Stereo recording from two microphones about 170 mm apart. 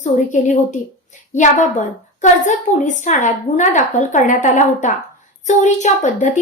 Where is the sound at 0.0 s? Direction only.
45° left (ahead or behind).